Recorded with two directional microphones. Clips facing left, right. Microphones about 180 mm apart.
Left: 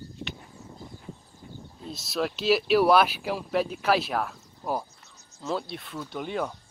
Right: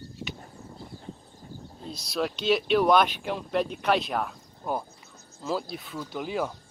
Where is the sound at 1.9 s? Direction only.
Centre (ahead or behind).